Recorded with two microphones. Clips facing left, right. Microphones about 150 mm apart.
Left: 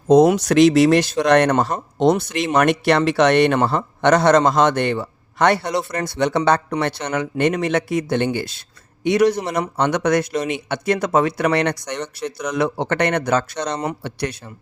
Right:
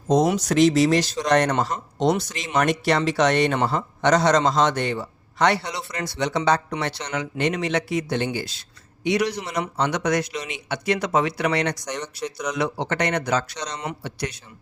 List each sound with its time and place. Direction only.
0.1 s speech: 65° left (ahead or behind)